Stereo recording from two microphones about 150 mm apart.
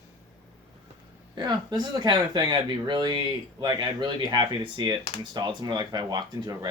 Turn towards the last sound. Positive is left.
turn(degrees=-25)  # may be behind; listen again after turning